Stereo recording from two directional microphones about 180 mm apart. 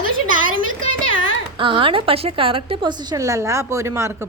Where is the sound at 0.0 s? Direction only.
50° right (ahead or behind).